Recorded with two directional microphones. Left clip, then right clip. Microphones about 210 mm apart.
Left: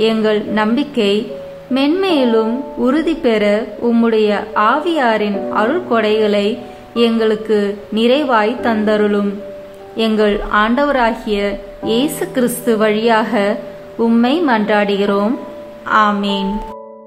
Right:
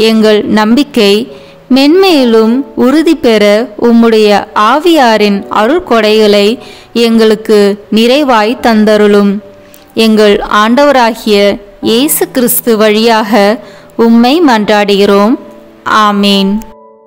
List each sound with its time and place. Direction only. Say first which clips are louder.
0.0 s a woman's voice: right 8 dB; 50° right (ahead or behind)